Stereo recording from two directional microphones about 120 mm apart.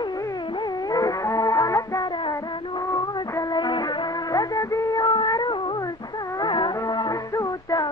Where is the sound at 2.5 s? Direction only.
40° left (ahead or behind).